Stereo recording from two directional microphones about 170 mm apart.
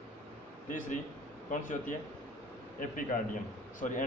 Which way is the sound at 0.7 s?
50° left (ahead or behind).